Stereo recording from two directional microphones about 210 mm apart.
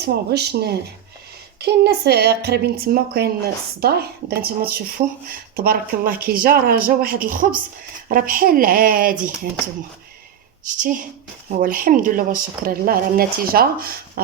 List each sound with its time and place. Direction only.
0.0 s a woman's voice: 50° right (ahead or behind)
10.7 s a woman's voice: 40° right (ahead or behind)